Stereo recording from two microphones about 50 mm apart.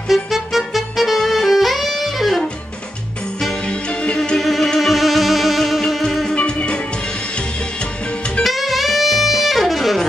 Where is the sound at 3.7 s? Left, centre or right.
Centre.